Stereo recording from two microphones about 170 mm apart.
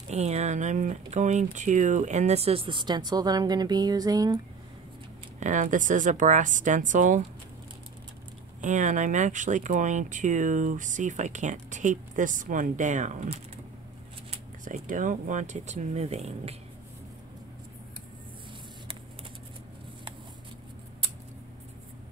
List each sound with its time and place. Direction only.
0.1 s speech: 40° right (ahead or behind); by 4.4 s 20° right (ahead or behind)
5.4 s speech: 50° right (ahead or behind)
8.5 s speech: 45° right (ahead or behind)
14.6 s speech: 50° right (ahead or behind)